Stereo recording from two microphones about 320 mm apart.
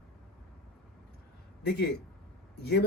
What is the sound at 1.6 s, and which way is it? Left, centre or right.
Speech, left.